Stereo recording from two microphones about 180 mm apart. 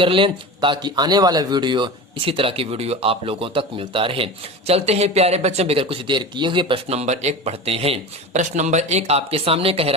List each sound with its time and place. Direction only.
0.0 s speech: 30° right (ahead or behind)